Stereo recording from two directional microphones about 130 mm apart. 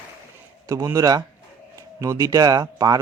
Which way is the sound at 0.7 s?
25° right (ahead or behind).